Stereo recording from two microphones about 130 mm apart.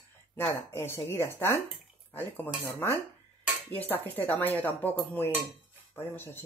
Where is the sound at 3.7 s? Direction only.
15° left (ahead or behind).